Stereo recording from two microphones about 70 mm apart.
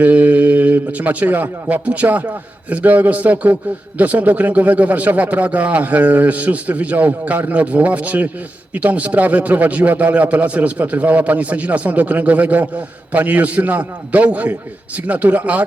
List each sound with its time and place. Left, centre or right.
0.0 s a man's voice: right